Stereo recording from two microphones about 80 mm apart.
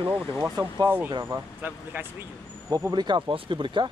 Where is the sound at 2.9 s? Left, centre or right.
Right.